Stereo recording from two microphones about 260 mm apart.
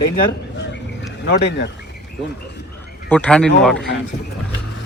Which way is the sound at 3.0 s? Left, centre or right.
Centre.